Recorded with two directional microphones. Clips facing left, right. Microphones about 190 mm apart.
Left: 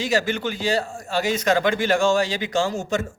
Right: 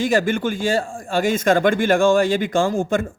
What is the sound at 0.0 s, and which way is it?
A man's voice, 50° right (ahead or behind).